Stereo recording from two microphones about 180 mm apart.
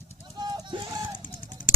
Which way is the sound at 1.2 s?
45° left (ahead or behind).